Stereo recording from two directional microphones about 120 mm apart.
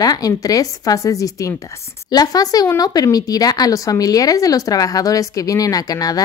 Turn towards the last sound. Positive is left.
turn(degrees=30)  # may be behind; listen again after turning